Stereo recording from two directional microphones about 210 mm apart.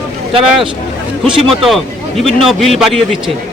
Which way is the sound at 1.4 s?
Centre (ahead or behind).